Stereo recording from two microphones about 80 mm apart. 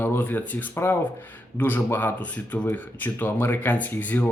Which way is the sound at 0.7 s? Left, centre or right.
Left.